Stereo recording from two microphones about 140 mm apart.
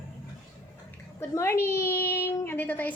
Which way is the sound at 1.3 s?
20° left (ahead or behind).